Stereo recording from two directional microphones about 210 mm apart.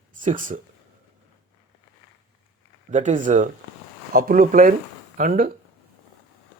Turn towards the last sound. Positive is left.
turn(degrees=-40)  # may be behind; listen again after turning